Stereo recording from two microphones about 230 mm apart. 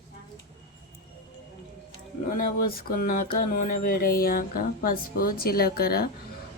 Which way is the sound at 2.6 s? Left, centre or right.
Left.